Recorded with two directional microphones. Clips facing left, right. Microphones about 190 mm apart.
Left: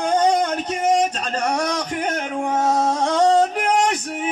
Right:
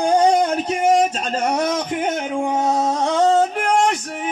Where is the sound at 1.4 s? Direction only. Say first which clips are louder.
Right 2 dB; 5° right (ahead or behind).